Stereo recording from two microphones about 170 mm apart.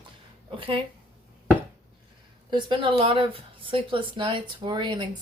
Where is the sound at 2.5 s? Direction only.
30° right (ahead or behind).